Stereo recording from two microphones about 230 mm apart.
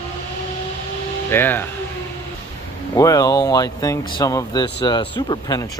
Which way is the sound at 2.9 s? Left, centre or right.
Centre.